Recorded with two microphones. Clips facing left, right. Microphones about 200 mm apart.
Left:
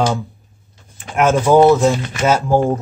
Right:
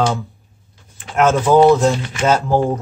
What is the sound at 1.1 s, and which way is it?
Speech, 15° left (ahead or behind).